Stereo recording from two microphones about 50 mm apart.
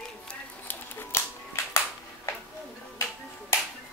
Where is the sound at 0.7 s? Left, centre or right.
Left.